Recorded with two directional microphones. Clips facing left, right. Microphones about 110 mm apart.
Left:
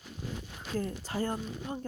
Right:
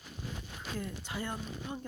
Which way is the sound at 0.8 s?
40° left (ahead or behind).